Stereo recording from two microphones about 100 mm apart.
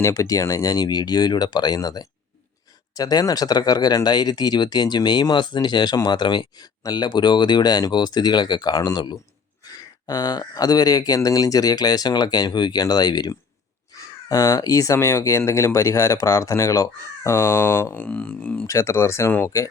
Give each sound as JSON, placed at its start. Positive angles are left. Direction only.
{"t": 0.0, "sound": "speech", "side_deg": 35}
{"t": 18.6, "sound": "speech", "side_deg": 30}